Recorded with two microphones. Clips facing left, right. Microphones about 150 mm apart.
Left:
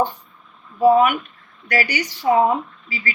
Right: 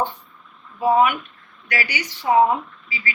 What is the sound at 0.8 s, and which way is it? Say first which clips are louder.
A woman's voice: left 3 dB; 40° left (ahead or behind).